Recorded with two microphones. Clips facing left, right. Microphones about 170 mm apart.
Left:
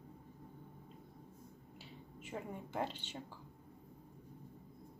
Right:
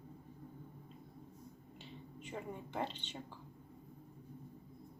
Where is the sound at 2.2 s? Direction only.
5° left (ahead or behind).